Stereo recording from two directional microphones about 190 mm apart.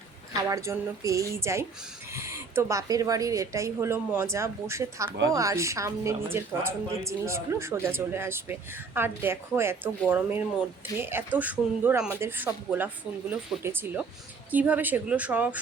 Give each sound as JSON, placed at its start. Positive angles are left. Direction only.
{"t": 0.4, "sound": "a woman's voice", "side_deg": -15}